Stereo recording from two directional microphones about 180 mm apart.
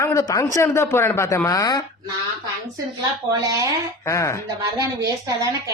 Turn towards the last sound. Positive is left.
turn(degrees=15)  # may be behind; listen again after turning